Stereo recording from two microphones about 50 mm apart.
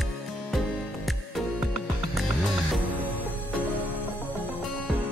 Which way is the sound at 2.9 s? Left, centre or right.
Left.